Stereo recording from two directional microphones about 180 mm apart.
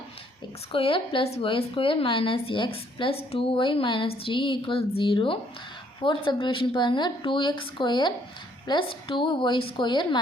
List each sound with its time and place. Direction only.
0.7 s speech: 30° left (ahead or behind)